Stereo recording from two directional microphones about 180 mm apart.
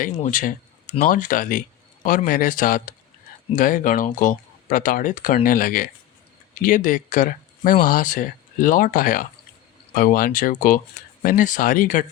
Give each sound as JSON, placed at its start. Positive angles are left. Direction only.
{"t": 0.2, "sound": "speech", "side_deg": 45}